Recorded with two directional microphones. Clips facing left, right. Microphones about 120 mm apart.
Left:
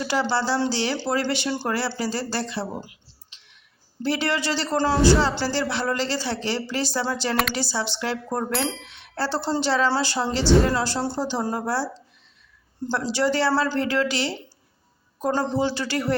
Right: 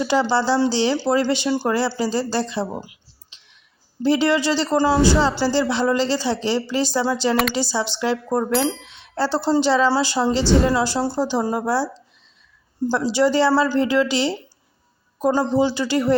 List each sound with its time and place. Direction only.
0.0 s speech: 20° right (ahead or behind)
8.5 s speech: centre (ahead or behind)
8.9 s speech: 20° right (ahead or behind)
12.9 s speech: 15° right (ahead or behind)